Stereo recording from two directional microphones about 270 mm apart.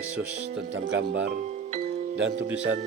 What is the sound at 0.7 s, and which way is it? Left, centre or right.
Speech, right.